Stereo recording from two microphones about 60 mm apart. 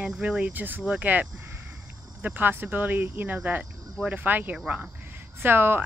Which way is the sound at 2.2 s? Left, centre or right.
Right.